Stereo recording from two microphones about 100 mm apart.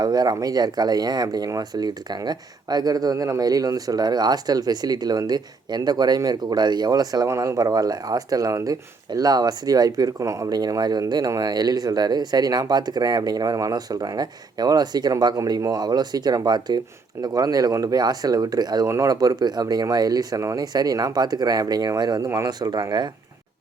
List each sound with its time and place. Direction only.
0.0 s speech: 40° right (ahead or behind)